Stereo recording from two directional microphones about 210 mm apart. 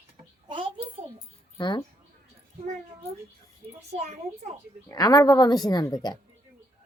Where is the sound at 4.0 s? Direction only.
30° right (ahead or behind).